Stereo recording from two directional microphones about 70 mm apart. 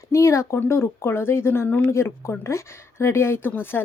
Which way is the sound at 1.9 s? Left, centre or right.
Left.